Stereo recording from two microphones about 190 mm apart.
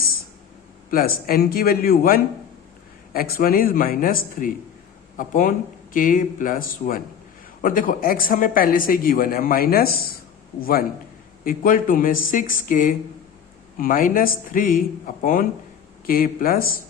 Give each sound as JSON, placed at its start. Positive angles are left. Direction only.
{"t": 0.9, "sound": "speech", "side_deg": 50}